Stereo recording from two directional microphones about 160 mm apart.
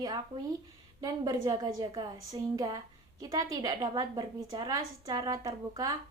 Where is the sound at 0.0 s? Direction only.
25° right (ahead or behind).